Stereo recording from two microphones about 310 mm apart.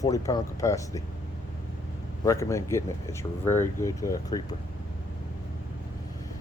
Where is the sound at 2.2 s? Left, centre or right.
Centre.